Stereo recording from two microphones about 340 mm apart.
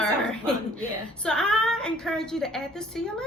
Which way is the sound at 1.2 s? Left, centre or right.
Centre.